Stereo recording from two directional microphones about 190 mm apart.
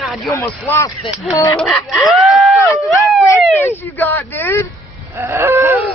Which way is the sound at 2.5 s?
15° left (ahead or behind).